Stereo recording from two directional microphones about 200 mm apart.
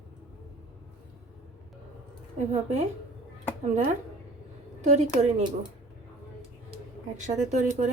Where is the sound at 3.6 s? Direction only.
35° right (ahead or behind).